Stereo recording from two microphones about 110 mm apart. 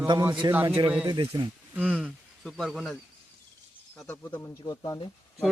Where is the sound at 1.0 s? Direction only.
45° right (ahead or behind).